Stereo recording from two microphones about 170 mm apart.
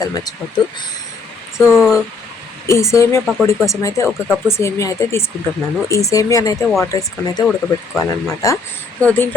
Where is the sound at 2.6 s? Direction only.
15° left (ahead or behind).